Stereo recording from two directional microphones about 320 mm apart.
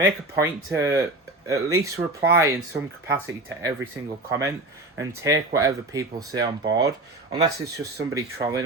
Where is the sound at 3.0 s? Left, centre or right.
Centre.